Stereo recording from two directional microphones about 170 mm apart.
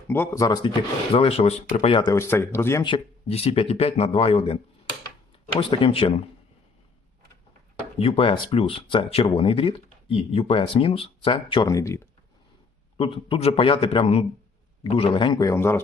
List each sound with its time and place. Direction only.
0.1 s speech: 15° left (ahead or behind)
1.1 s speech: 35° left (ahead or behind)
2.1 s speech: 15° left (ahead or behind)
2.8 s speech: 30° left (ahead or behind)
7.9 s speech: 35° left (ahead or behind)
11.7 s speech: 15° left (ahead or behind)
13.0 s speech: 30° left (ahead or behind); by 15.8 s 15° left (ahead or behind)